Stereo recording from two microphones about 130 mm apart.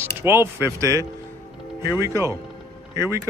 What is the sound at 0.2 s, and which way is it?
Speech, 20° right (ahead or behind).